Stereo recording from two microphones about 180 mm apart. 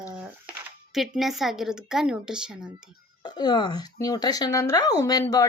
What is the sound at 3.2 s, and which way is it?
Speech, 25° left (ahead or behind).